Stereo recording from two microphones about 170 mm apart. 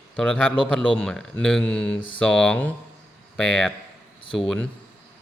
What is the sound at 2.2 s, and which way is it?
Speech, 5° left (ahead or behind).